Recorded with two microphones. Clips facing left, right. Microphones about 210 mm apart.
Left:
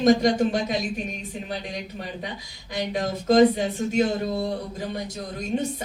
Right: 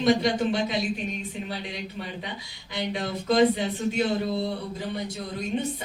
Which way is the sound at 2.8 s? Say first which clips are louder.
Left 3 dB; 45° left (ahead or behind).